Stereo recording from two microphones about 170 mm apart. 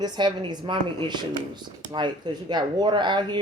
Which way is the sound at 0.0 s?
25° right (ahead or behind).